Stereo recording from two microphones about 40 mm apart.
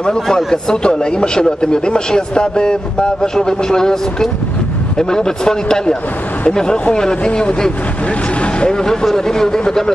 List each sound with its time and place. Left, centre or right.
0.0 s a man's voice: left